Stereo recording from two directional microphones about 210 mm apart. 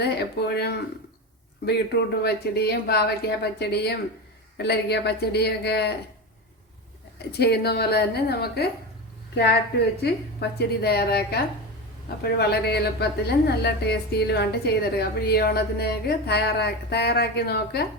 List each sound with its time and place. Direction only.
0.0 s a woman's voice: 50° left (ahead or behind)
7.2 s a woman's voice: 50° left (ahead or behind)
10.0 s a woman's voice: 50° left (ahead or behind)